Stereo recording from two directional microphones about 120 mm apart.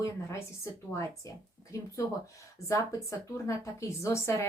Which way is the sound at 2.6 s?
25° left (ahead or behind).